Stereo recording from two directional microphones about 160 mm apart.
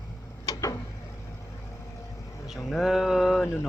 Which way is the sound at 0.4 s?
20° left (ahead or behind).